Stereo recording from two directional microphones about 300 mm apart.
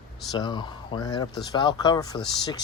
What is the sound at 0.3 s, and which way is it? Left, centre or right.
Speech, centre.